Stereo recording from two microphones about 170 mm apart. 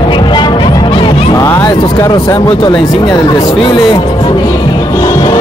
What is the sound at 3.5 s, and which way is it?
Music, 30° left (ahead or behind).